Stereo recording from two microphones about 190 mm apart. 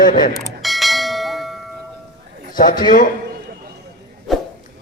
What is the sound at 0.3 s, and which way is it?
Bell, centre (ahead or behind).